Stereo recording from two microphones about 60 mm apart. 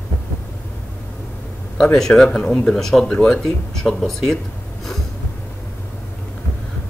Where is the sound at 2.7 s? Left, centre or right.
Centre.